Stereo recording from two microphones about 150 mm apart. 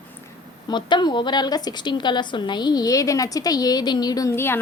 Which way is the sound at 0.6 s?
30° left (ahead or behind).